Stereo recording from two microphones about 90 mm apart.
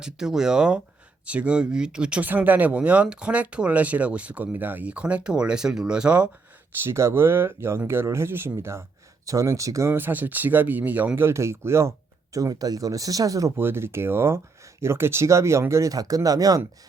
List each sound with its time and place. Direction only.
0.0 s speech: 5° right (ahead or behind)
6.8 s speech: 30° right (ahead or behind)
13.6 s speech: 25° right (ahead or behind); by 16.6 s 45° right (ahead or behind)